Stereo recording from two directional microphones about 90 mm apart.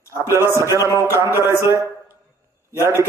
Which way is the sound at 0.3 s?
35° right (ahead or behind).